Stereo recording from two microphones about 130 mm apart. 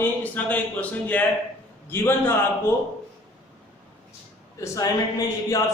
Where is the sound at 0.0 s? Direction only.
10° left (ahead or behind).